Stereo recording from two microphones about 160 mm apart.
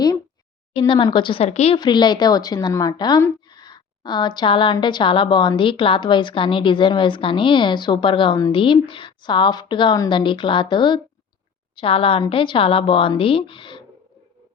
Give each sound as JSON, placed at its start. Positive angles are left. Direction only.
{"t": 0.8, "sound": "a woman's voice", "side_deg": 30}
{"t": 1.7, "sound": "a woman's voice", "side_deg": 30}